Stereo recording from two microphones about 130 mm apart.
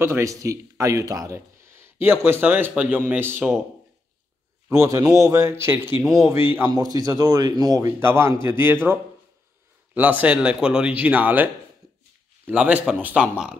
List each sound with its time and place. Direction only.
0.0 s speech: 20° right (ahead or behind)
4.6 s a man's voice: 25° right (ahead or behind)
6.7 s a man's voice: 30° right (ahead or behind); by 13.6 s 5° right (ahead or behind)